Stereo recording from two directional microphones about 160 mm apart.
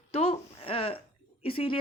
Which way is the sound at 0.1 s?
40° left (ahead or behind).